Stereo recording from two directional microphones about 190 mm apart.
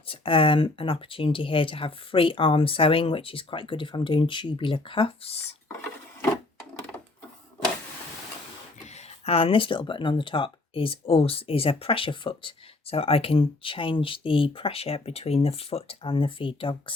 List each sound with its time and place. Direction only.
0.1 s speech: 25° left (ahead or behind)
9.2 s speech: 30° left (ahead or behind)